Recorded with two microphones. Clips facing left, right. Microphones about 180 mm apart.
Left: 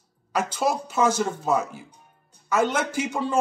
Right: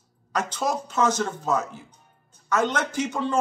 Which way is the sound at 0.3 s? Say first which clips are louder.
Left 2 dB; 10° left (ahead or behind).